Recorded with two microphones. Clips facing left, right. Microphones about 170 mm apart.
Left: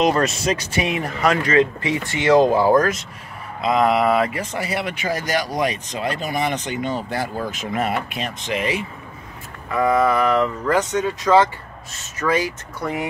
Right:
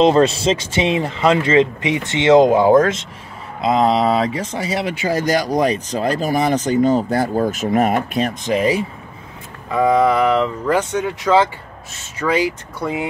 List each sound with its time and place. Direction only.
0.0 s speech: 30° right (ahead or behind)
9.7 s speech: 15° right (ahead or behind)